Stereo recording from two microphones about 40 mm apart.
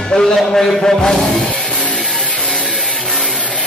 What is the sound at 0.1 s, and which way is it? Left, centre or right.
Speech, left.